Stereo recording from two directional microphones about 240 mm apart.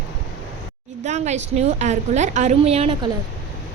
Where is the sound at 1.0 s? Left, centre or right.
Right.